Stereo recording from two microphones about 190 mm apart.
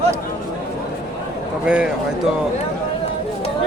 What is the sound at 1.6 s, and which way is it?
Speech, 5° right (ahead or behind).